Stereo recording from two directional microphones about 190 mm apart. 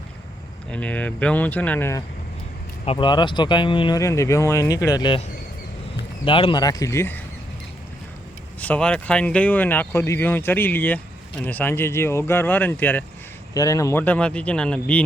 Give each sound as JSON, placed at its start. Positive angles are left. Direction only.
{"t": 0.7, "sound": "speech", "side_deg": 5}
{"t": 2.8, "sound": "speech", "side_deg": 30}
{"t": 6.2, "sound": "speech", "side_deg": 25}
{"t": 8.6, "sound": "speech", "side_deg": 5}